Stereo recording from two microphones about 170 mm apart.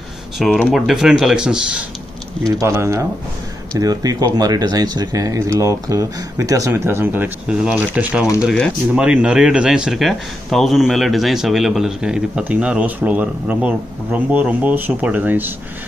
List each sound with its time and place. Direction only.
0.4 s speech: centre (ahead or behind)
2.4 s speech: 15° right (ahead or behind)